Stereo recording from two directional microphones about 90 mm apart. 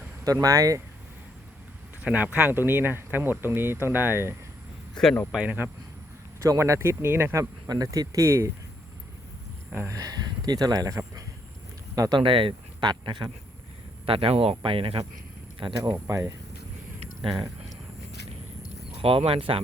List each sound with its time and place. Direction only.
0.3 s speech: 35° right (ahead or behind)
2.0 s speech: 20° right (ahead or behind)
5.0 s speech: 10° left (ahead or behind)
5.3 s speech: 15° right (ahead or behind)
6.4 s speech: 35° right (ahead or behind)
7.7 s speech: 45° right (ahead or behind)
9.7 s speech: 30° right (ahead or behind)
10.0 s speech: 50° right (ahead or behind)
12.1 s speech: 75° right (ahead or behind); by 13.3 s 60° right (ahead or behind)
14.0 s speech: 90° right
15.8 s speech: 40° right (ahead or behind)
19.0 s speech: 90° right